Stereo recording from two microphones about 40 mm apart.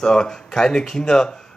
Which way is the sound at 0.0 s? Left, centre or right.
Centre.